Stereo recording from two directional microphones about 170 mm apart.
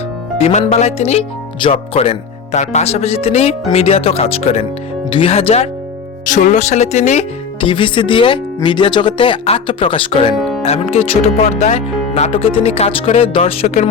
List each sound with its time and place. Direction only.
0.3 s speech: 35° left (ahead or behind)
6.2 s speech: 50° left (ahead or behind)